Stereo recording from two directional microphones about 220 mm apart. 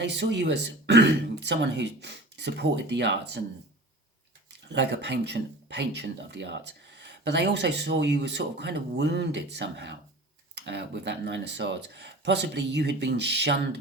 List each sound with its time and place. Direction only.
0.0 s speech: 50° right (ahead or behind)
4.7 s speech: 50° right (ahead or behind)